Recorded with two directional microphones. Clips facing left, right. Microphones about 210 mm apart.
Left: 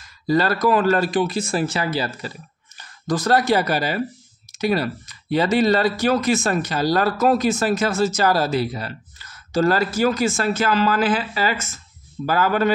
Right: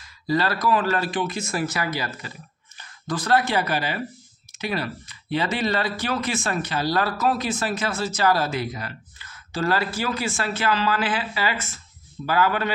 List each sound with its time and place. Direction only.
0.0 s speech: 45° left (ahead or behind)
2.8 s speech: 40° left (ahead or behind)